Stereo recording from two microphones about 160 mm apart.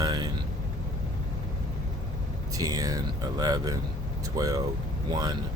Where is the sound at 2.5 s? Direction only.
20° right (ahead or behind).